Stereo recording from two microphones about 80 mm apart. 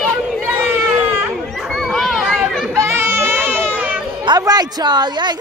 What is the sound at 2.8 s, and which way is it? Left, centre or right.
Baby cry, right.